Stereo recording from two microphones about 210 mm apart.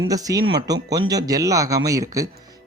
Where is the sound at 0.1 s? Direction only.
15° right (ahead or behind).